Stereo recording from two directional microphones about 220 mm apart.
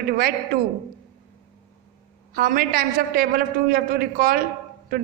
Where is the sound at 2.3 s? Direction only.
40° right (ahead or behind).